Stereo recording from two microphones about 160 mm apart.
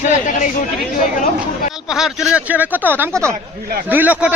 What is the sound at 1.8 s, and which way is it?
A man's voice, 5° right (ahead or behind).